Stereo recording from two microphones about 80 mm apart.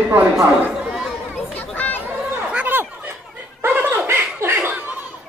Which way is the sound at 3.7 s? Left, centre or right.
Right.